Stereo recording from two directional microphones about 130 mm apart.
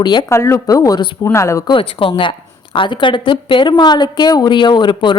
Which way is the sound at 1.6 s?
40° left (ahead or behind).